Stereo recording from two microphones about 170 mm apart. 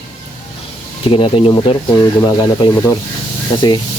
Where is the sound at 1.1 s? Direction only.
30° left (ahead or behind).